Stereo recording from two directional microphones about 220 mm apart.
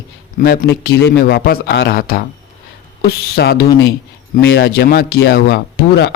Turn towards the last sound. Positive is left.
turn(degrees=50)  # may be behind; listen again after turning